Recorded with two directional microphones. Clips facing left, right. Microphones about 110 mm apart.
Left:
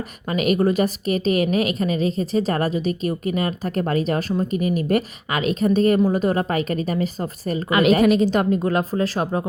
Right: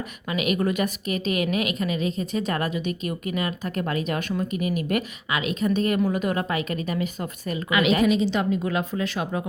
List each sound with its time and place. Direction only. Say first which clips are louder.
0.3 s a woman's voice: left 5 dB; 40° left (ahead or behind)
8.0 s a woman's voice: left 4 dB; 50° left (ahead or behind); by 9.5 s 35° left (ahead or behind)